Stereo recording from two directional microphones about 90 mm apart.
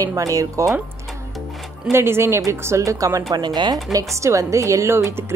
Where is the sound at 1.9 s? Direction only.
30° right (ahead or behind).